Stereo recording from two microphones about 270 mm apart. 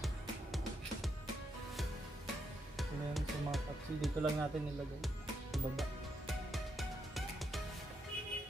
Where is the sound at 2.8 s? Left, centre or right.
Centre.